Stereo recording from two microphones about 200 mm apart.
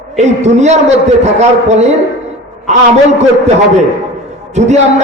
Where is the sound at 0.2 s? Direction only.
35° right (ahead or behind).